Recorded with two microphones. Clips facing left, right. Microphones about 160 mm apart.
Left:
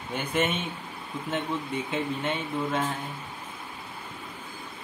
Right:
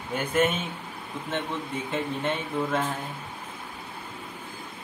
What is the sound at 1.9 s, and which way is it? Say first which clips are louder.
Speech: right 2 dB; centre (ahead or behind).